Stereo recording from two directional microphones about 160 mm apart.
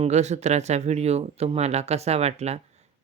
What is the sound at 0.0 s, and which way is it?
Speech, 45° right (ahead or behind).